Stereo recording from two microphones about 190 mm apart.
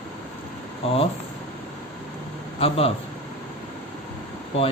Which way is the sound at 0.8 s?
30° left (ahead or behind).